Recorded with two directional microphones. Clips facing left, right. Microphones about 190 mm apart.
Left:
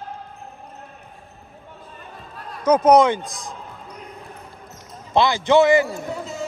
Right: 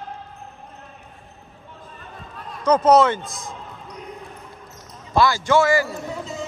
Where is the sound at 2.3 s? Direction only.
5° left (ahead or behind).